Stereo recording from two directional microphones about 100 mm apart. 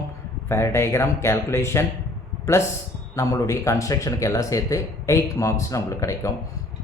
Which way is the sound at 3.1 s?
30° left (ahead or behind).